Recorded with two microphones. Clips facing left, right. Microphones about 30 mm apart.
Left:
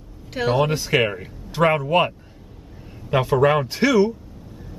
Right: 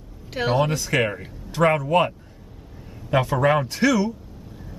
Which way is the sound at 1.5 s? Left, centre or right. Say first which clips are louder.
Left 1 dB; centre.